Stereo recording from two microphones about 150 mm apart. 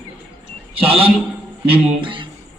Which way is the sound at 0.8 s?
40° right (ahead or behind).